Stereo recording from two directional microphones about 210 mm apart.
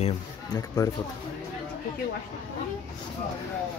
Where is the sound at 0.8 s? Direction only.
15° left (ahead or behind).